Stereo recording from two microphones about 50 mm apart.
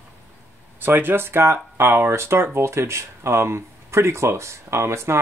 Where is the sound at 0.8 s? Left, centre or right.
Right.